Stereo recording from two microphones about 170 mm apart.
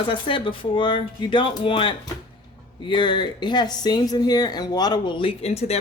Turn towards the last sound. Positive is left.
turn(degrees=40)  # may be behind; listen again after turning